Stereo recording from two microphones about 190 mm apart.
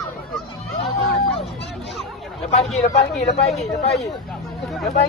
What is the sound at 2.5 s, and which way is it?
Speech, 35° left (ahead or behind).